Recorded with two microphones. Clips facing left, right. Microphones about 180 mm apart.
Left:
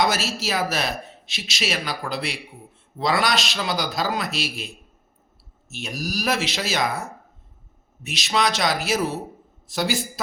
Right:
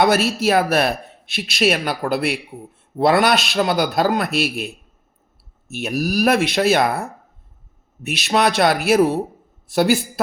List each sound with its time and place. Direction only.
0.0 s speech: 60° right (ahead or behind)